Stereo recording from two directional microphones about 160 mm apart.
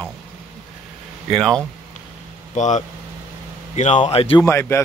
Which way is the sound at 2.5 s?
50° left (ahead or behind).